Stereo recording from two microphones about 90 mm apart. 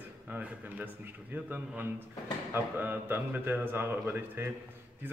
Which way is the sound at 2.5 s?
25° right (ahead or behind).